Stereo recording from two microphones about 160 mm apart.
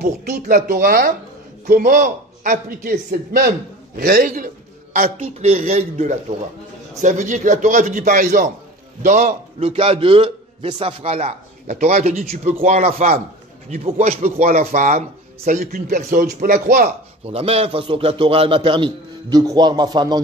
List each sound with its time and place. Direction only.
0.0 s speech: 75° right (ahead or behind)
0.7 s a man's voice: 60° right (ahead or behind)
5.2 s a man's voice: 40° right (ahead or behind)
9.6 s a man's voice: 35° right (ahead or behind); by 16.9 s 60° right (ahead or behind)
17.3 s a man's voice: 40° right (ahead or behind)